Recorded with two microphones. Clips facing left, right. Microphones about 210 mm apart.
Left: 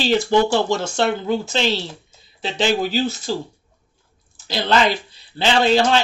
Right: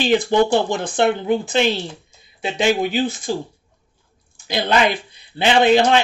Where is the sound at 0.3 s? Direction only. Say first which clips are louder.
Right 1 dB; 15° right (ahead or behind).